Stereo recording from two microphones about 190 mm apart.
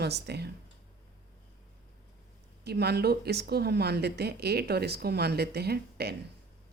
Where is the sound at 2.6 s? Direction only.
60° right (ahead or behind).